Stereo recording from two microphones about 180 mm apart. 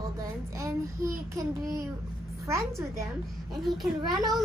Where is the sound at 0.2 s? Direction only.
15° right (ahead or behind).